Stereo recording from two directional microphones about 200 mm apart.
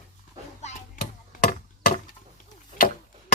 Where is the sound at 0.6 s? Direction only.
35° left (ahead or behind).